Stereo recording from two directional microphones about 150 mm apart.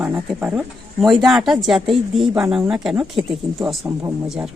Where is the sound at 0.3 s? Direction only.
10° right (ahead or behind).